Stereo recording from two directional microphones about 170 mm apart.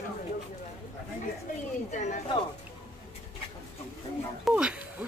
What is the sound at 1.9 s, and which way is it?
Speech, 45° left (ahead or behind).